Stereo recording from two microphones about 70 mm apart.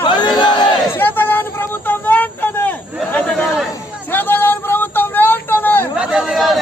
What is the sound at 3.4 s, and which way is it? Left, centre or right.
Chatter, centre.